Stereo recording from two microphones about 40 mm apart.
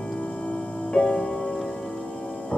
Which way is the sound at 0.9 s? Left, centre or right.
Centre.